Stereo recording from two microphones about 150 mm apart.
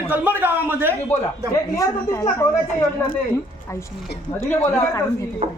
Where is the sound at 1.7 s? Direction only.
20° left (ahead or behind).